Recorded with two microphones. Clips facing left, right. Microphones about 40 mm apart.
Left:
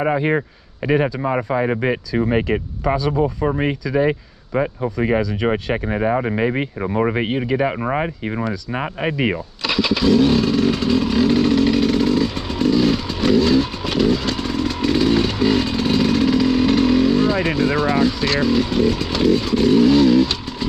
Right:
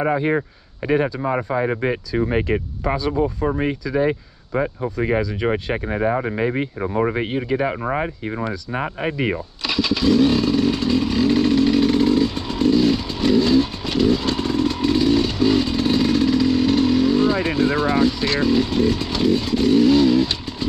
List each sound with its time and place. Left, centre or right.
0.1 s speech: left
2.8 s speech: centre
3.4 s speech: left
5.9 s speech: left
6.8 s speech: centre
7.4 s speech: centre
7.9 s speech: left
9.7 s motorcycle: centre
14.2 s motorcycle: centre
17.6 s speech: centre
20.0 s vehicle: centre